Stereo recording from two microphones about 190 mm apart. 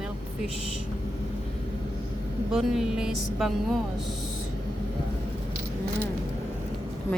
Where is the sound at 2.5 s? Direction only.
5° right (ahead or behind).